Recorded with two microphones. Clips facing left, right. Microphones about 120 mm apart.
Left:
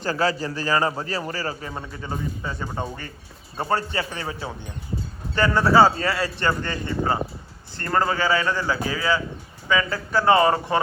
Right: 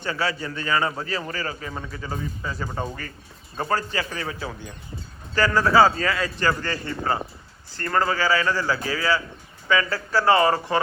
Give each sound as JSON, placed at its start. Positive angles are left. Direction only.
{"t": 0.1, "sound": "a man's voice", "side_deg": 35}
{"t": 1.7, "sound": "a man's voice", "side_deg": 20}
{"t": 7.8, "sound": "a man's voice", "side_deg": 25}